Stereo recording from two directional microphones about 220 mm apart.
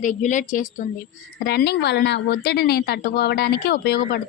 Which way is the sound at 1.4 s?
45° left (ahead or behind).